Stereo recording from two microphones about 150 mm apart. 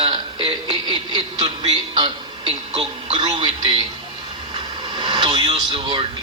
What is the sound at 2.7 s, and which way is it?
Speech, 40° right (ahead or behind).